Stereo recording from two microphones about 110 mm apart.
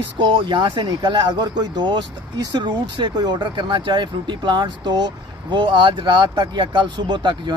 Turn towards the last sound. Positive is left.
turn(degrees=-45)  # may be behind; listen again after turning